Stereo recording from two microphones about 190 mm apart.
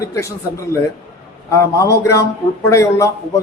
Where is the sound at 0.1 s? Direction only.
15° left (ahead or behind).